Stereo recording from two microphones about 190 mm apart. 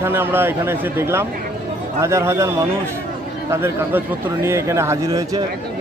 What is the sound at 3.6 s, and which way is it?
Speech, 10° right (ahead or behind).